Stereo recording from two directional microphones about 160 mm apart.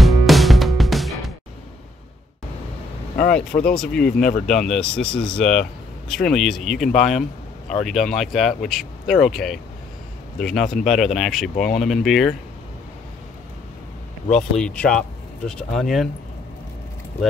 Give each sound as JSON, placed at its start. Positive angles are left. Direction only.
{"t": 0.0, "sound": "music", "side_deg": 0}
{"t": 3.7, "sound": "speech", "side_deg": 5}
{"t": 11.5, "sound": "speech", "side_deg": 55}
{"t": 11.8, "sound": "speech", "side_deg": 0}
{"t": 14.3, "sound": "speech", "side_deg": 5}